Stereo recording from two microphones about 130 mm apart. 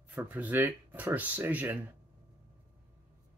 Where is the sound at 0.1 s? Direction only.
15° right (ahead or behind).